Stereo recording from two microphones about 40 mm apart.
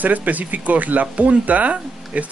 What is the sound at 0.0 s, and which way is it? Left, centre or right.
Speech, right.